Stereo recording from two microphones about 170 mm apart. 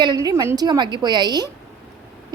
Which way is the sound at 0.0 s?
25° right (ahead or behind).